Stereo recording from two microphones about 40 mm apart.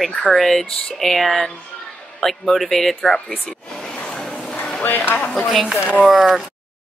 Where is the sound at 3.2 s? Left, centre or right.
Left.